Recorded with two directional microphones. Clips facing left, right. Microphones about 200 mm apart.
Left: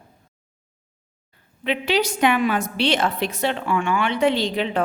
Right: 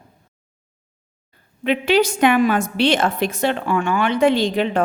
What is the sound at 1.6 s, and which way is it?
A woman's voice, 50° right (ahead or behind).